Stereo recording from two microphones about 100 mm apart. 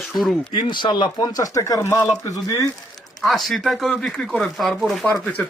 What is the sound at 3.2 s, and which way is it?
Speech, centre (ahead or behind).